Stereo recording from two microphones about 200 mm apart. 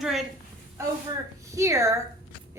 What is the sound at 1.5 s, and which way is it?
Speech, 15° right (ahead or behind).